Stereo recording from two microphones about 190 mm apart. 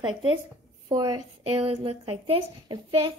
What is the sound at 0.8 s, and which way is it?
Speech, 20° right (ahead or behind).